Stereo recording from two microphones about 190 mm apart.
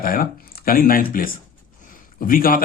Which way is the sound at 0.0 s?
50° left (ahead or behind).